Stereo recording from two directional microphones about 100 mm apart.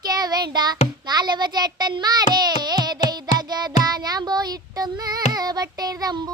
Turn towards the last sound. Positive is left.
turn(degrees=-40)  # may be behind; listen again after turning